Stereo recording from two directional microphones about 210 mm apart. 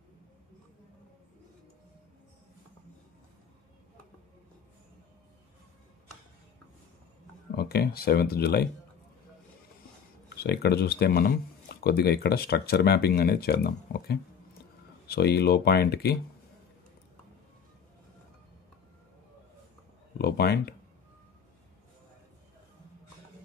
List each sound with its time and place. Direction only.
7.5 s speech: 45° left (ahead or behind)
10.3 s speech: 50° left (ahead or behind)
20.2 s speech: 50° left (ahead or behind)